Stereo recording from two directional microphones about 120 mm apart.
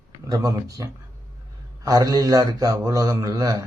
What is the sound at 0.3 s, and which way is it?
A man's voice, 30° right (ahead or behind).